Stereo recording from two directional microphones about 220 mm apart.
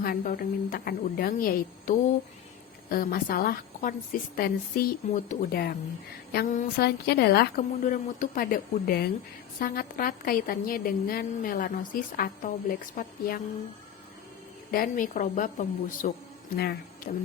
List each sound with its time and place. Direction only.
0.0 s a woman's voice: 40° left (ahead or behind)
14.7 s a woman's voice: 40° left (ahead or behind)